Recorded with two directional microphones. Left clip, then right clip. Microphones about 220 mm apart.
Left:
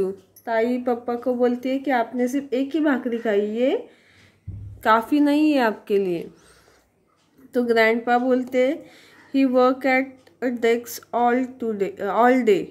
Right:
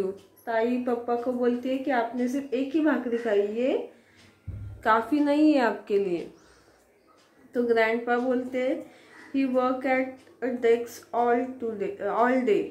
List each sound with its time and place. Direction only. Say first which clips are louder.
0.0 s a woman's voice: left 5 dB; 45° left (ahead or behind)
4.8 s a woman's voice: left 5 dB; 45° left (ahead or behind)
7.5 s a woman's voice: left 5 dB; 45° left (ahead or behind)